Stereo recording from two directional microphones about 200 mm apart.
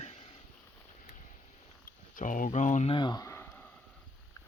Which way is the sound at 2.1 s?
40° left (ahead or behind).